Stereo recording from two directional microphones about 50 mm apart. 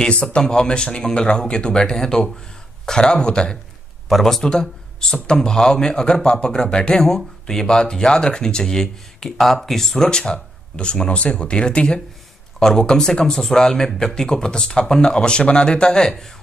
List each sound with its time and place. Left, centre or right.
0.1 s speech: centre
4.1 s speech: centre
10.0 s speech: centre